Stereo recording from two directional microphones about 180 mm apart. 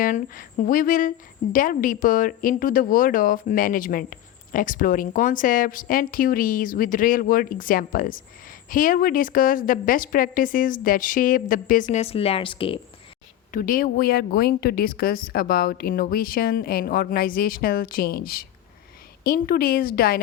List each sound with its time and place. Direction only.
0.0 s speech: 50° left (ahead or behind); by 12.8 s 30° left (ahead or behind)
13.5 s a woman's voice: 50° left (ahead or behind)